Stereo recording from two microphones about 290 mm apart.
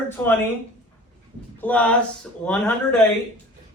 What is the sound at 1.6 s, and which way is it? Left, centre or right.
Speech, centre.